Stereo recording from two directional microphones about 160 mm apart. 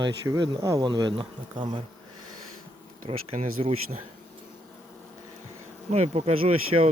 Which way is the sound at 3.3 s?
40° right (ahead or behind).